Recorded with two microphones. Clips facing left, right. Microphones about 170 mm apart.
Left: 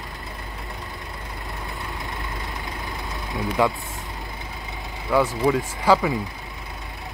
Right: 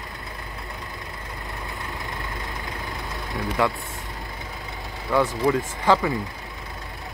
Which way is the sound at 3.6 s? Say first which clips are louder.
Left 2 dB; 15° left (ahead or behind).